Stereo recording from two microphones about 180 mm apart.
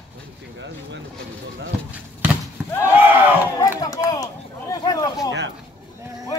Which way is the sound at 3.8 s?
20° left (ahead or behind).